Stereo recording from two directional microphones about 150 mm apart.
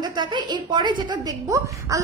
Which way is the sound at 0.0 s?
30° right (ahead or behind).